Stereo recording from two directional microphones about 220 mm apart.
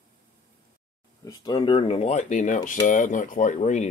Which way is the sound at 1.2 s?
20° left (ahead or behind).